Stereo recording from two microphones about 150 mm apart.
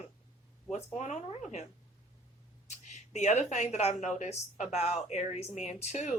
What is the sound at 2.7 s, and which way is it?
Speech, 50° left (ahead or behind).